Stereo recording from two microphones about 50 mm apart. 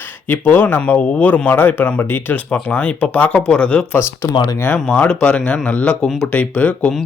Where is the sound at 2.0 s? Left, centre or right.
Left.